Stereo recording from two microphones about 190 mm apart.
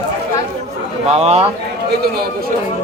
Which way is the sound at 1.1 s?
35° right (ahead or behind).